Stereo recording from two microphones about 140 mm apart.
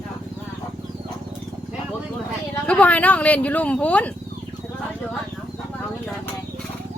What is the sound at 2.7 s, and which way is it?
Speech, 10° left (ahead or behind).